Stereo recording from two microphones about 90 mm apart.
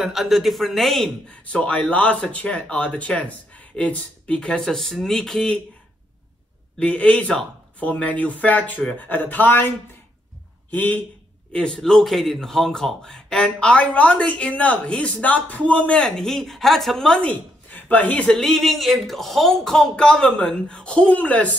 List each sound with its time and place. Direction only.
0.0 s a man's voice: centre (ahead or behind)
1.4 s speech: 15° left (ahead or behind)
6.8 s speech: 15° left (ahead or behind)